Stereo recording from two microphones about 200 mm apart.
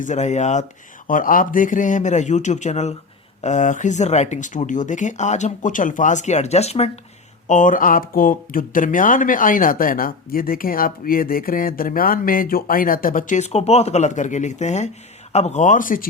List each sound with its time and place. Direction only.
0.0 s speech: 35° left (ahead or behind)